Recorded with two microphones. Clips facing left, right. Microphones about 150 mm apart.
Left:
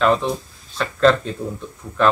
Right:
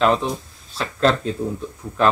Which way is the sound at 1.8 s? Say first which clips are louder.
Right 3 dB; 10° right (ahead or behind).